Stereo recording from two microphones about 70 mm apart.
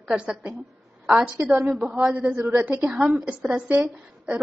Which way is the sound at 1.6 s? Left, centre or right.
Right.